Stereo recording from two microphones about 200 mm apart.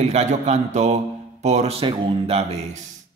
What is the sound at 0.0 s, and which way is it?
A man's voice, 35° right (ahead or behind).